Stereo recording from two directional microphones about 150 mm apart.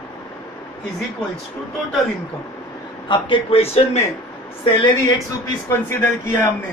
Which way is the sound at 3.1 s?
35° left (ahead or behind).